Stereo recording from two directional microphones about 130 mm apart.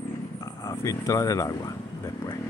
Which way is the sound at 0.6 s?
25° left (ahead or behind).